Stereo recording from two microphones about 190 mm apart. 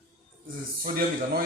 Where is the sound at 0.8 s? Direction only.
50° right (ahead or behind).